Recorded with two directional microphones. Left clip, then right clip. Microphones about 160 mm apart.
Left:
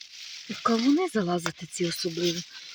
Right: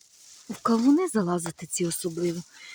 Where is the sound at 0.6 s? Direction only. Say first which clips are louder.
Right 1 dB; 20° right (ahead or behind).